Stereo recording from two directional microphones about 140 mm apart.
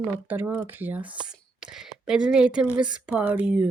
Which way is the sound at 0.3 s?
15° right (ahead or behind).